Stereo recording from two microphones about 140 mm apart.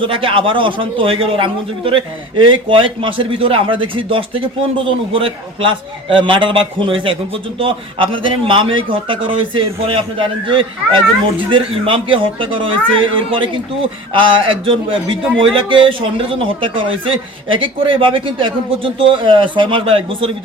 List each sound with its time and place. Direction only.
0.0 s a man's voice: 40° right (ahead or behind)